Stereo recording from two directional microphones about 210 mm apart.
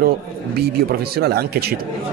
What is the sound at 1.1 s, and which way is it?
Speech, 50° right (ahead or behind).